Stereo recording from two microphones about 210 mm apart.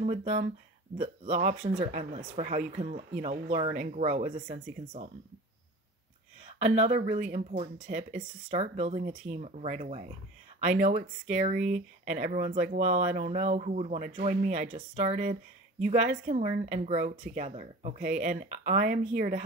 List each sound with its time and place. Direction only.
0.0 s speech: 35° right (ahead or behind)
3.7 s speech: 40° right (ahead or behind)
6.6 s speech: 35° right (ahead or behind)